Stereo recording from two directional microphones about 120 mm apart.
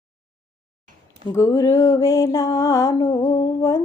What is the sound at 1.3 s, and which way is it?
Female singing, 30° left (ahead or behind).